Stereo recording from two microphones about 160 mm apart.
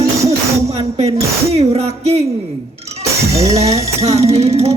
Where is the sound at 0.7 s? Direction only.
40° right (ahead or behind).